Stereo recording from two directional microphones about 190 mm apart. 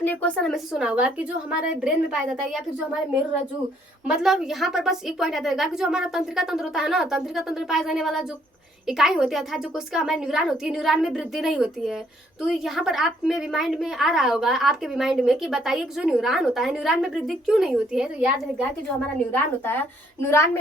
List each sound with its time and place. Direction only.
0.0 s a woman's voice: 10° left (ahead or behind)
4.0 s a woman's voice: centre (ahead or behind)
18.9 s a woman's voice: 5° left (ahead or behind)